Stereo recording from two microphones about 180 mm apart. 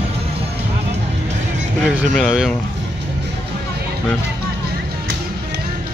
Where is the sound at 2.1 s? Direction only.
Centre (ahead or behind).